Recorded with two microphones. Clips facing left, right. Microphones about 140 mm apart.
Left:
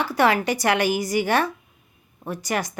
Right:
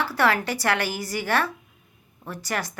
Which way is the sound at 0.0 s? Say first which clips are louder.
Left 3 dB; 15° left (ahead or behind).